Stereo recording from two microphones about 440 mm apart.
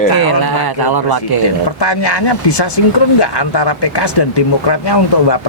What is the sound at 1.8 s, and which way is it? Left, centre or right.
Speech, left.